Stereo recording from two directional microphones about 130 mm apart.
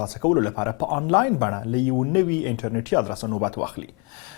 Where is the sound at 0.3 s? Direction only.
30° left (ahead or behind).